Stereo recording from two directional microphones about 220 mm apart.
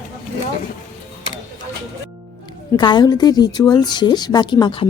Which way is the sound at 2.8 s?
20° left (ahead or behind).